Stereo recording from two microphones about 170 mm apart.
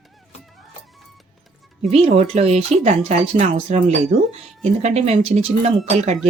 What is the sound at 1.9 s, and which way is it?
Speech, 40° right (ahead or behind).